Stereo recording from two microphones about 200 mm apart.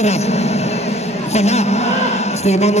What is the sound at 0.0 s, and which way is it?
Vehicle, 35° left (ahead or behind).